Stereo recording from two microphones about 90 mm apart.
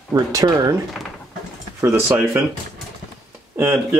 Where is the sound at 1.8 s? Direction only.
30° right (ahead or behind).